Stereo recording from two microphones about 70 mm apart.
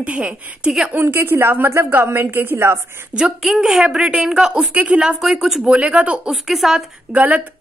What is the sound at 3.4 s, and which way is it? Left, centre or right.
A woman's voice, centre.